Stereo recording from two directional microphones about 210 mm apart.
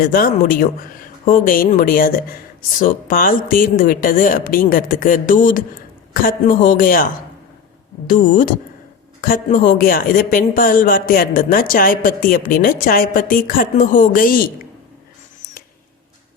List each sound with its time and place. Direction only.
0.0 s speech: 45° left (ahead or behind)